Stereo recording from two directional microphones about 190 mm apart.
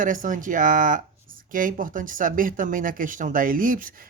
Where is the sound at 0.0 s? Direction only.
45° right (ahead or behind).